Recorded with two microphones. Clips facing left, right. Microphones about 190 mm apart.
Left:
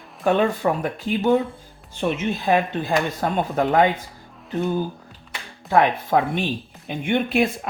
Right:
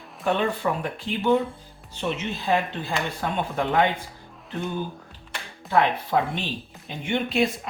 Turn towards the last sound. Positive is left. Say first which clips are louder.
# left 3 dB
turn(degrees=55)  # may be behind; listen again after turning